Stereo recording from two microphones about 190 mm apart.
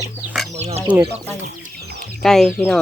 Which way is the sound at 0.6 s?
35° right (ahead or behind).